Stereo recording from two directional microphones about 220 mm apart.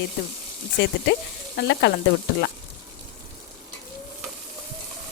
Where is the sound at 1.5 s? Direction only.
50° left (ahead or behind).